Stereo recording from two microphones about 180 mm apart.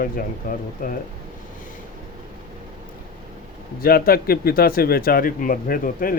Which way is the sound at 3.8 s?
55° left (ahead or behind).